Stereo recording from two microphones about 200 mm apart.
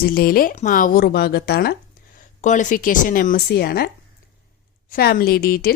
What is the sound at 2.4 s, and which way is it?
Speech, 40° left (ahead or behind).